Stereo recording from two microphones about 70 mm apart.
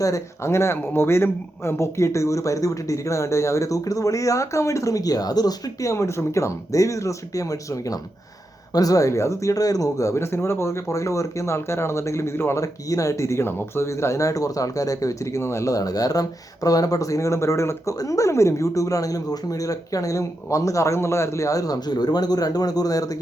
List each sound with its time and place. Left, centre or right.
0.0 s speech: left
5.9 s speech: left
10.2 s speech: left
12.6 s speech: left